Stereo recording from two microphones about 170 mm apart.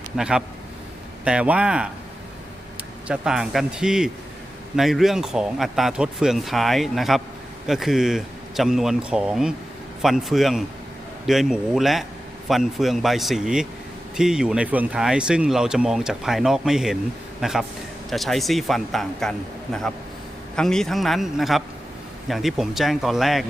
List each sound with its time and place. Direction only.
0.2 s speech: 5° right (ahead or behind)
3.1 s speech: 5° right (ahead or behind)
20.6 s speech: 5° left (ahead or behind)